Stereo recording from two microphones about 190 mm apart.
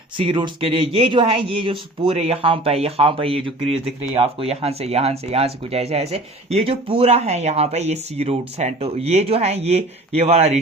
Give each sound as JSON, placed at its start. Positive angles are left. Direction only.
{"t": 0.2, "sound": "speech", "side_deg": -25}